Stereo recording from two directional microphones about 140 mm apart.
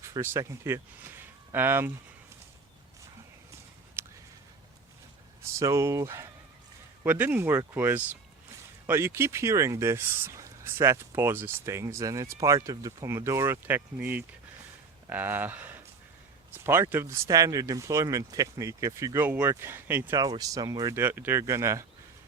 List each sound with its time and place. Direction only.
0.0 s speech: 20° right (ahead or behind)
4.0 s a sound: 15° right (ahead or behind)
5.5 s speech: 20° right (ahead or behind)
20.1 s speech: 25° right (ahead or behind)